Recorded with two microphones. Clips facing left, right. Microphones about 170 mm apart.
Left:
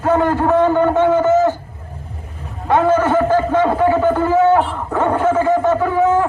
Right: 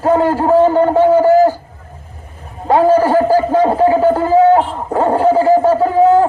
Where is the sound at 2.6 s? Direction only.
35° right (ahead or behind).